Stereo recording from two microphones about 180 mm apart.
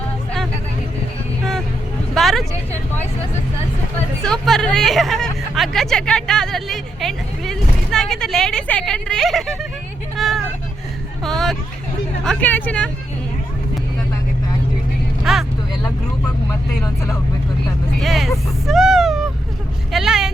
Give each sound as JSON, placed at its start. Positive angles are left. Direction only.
{"t": 2.1, "sound": "vehicle", "side_deg": 0}
{"t": 4.2, "sound": "speech", "side_deg": 5}
{"t": 10.2, "sound": "vehicle", "side_deg": 0}
{"t": 12.2, "sound": "speech", "side_deg": 5}
{"t": 15.2, "sound": "vehicle", "side_deg": 0}
{"t": 16.5, "sound": "speech", "side_deg": 20}
{"t": 18.0, "sound": "speech", "side_deg": 0}
{"t": 19.9, "sound": "vehicle", "side_deg": 0}